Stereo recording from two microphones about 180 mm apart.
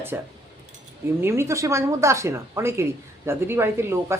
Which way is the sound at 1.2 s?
15° right (ahead or behind).